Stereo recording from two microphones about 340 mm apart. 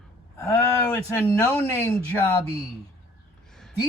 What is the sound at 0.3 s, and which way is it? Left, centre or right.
Speech, centre.